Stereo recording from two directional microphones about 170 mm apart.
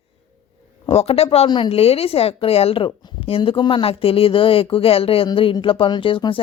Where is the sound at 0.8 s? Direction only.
35° left (ahead or behind).